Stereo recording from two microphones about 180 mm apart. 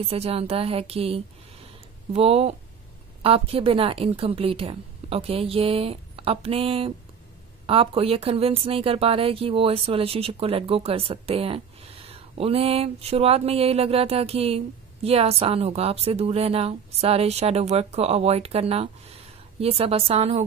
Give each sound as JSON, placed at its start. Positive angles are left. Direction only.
{"t": 0.0, "sound": "speech", "side_deg": -35}